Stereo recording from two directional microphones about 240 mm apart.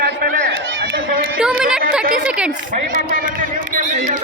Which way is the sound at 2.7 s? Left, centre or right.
Right.